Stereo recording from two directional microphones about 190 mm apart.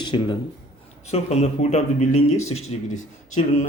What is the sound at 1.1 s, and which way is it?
Speech, 35° left (ahead or behind).